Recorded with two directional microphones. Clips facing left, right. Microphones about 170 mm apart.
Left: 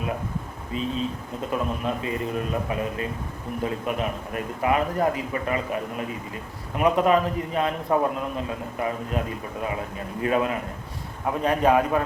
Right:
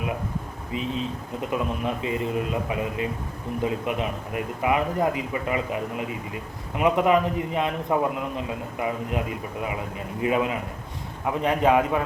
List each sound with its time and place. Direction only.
0.7 s a man's voice: 20° right (ahead or behind)